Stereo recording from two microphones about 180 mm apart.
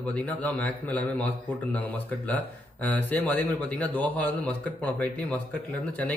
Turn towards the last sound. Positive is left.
turn(degrees=10)  # may be behind; listen again after turning